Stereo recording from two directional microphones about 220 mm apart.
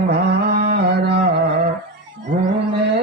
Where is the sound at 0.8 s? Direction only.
50° right (ahead or behind).